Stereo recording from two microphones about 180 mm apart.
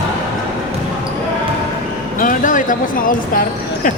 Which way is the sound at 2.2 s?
50° left (ahead or behind).